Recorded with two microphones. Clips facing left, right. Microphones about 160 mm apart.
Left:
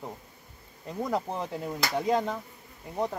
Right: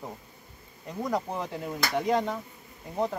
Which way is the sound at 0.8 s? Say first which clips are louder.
Even; centre (ahead or behind).